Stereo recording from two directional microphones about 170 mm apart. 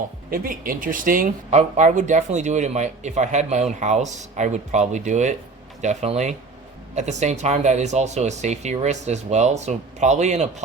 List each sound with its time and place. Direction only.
0.3 s speech: 55° right (ahead or behind)